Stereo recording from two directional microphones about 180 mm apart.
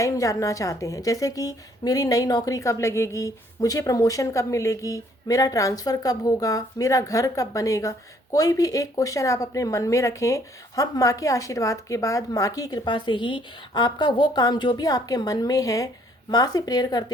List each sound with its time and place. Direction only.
0.0 s a woman's voice: 15° left (ahead or behind)